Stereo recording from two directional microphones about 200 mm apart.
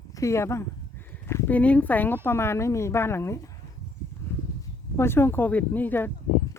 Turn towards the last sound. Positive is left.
turn(degrees=10)  # may be behind; listen again after turning